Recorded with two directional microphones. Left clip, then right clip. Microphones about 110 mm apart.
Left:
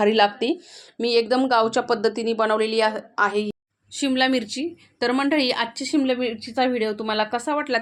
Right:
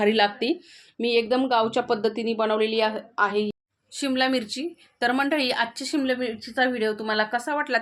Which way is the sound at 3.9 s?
20° left (ahead or behind).